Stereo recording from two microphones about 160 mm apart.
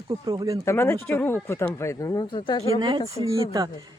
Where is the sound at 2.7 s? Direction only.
30° right (ahead or behind).